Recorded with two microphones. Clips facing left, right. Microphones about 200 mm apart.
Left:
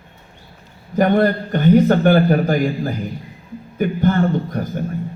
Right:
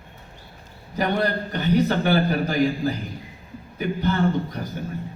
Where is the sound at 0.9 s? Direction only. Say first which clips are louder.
Left 8 dB; 50° left (ahead or behind).